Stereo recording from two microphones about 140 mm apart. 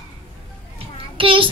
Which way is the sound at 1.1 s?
40° right (ahead or behind).